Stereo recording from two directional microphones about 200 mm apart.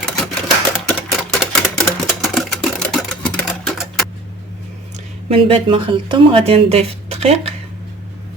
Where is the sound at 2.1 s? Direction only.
Centre (ahead or behind).